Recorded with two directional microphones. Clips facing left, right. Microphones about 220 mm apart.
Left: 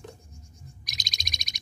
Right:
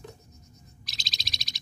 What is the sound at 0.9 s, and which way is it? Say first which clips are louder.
Bird: even; 15° left (ahead or behind).